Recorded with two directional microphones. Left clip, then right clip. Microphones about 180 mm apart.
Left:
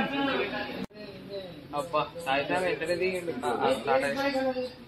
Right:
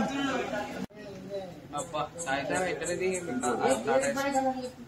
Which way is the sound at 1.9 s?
35° left (ahead or behind).